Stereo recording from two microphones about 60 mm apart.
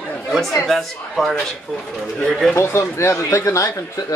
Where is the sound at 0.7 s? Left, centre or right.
Centre.